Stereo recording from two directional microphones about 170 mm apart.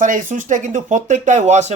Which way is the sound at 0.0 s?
50° right (ahead or behind).